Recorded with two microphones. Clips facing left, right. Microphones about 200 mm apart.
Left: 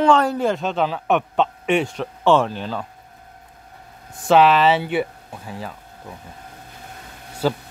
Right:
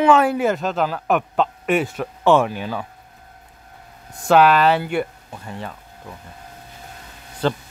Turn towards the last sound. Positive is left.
turn(degrees=5)  # may be behind; listen again after turning